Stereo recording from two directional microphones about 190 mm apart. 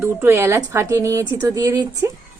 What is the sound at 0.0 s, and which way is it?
A woman's voice, 10° right (ahead or behind).